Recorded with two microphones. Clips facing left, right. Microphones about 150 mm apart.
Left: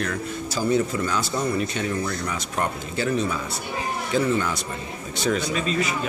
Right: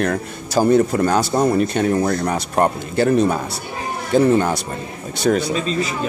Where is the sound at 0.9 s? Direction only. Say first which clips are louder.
Right 8 dB; 65° right (ahead or behind).